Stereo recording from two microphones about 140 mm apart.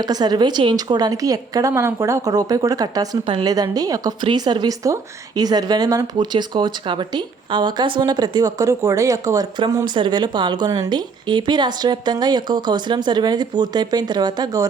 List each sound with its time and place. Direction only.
0.0 s a woman's voice: 30° right (ahead or behind)